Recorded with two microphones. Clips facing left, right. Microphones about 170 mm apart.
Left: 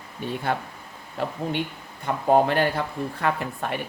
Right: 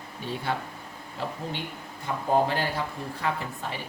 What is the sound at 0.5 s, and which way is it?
Speech, 55° left (ahead or behind).